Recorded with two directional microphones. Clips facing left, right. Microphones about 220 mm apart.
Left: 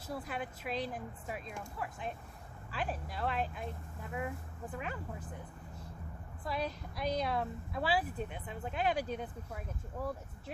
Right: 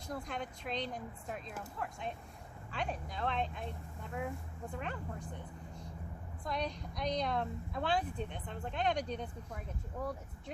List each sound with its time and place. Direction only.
0.1 s a woman's voice: 5° left (ahead or behind)
6.4 s a woman's voice: 5° left (ahead or behind)